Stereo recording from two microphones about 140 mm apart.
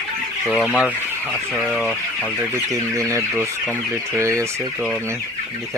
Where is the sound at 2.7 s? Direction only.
20° right (ahead or behind).